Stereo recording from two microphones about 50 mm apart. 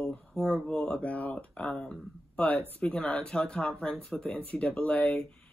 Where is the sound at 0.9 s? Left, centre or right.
Left.